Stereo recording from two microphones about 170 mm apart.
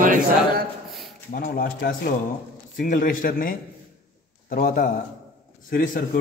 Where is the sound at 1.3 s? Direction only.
60° left (ahead or behind).